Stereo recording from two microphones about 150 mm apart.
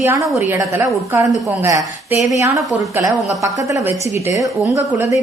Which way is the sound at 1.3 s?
25° right (ahead or behind).